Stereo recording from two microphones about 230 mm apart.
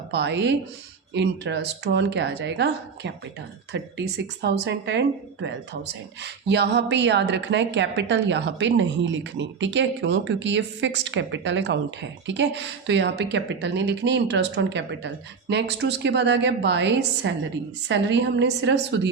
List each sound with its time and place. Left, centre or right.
0.1 s a woman's voice: right